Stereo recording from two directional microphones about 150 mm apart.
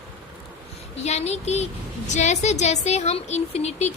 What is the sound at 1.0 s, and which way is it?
A woman's voice, 45° left (ahead or behind).